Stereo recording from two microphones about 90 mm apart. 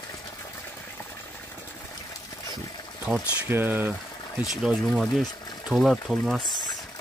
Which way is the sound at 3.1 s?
15° right (ahead or behind).